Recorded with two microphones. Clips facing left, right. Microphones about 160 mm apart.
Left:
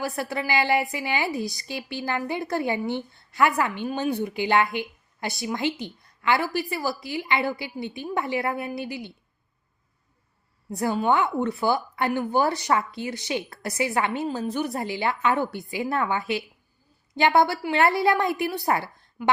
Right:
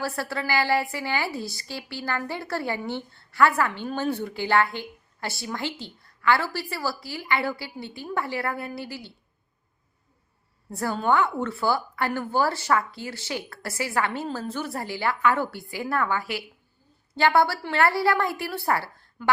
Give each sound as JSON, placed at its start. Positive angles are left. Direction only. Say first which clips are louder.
{"t": 0.0, "sound": "a woman's voice", "louder": "left 1 dB", "side_deg": 15}
{"t": 10.7, "sound": "a woman's voice", "louder": "left 1 dB", "side_deg": 15}